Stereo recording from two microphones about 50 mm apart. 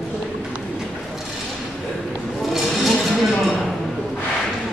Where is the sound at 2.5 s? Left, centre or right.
Centre.